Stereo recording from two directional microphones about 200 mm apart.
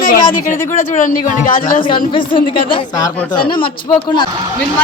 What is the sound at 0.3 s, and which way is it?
Speech, 40° left (ahead or behind).